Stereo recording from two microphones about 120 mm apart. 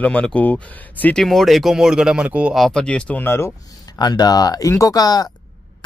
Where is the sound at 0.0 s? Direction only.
10° left (ahead or behind).